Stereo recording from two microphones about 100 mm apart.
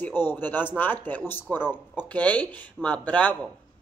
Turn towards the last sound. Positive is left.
turn(degrees=10)  # may be behind; listen again after turning